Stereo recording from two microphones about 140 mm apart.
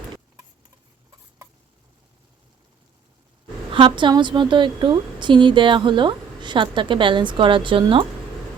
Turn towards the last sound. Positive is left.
turn(degrees=-40)  # may be behind; listen again after turning